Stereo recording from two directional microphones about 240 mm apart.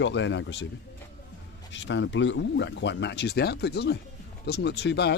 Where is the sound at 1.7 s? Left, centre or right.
Left.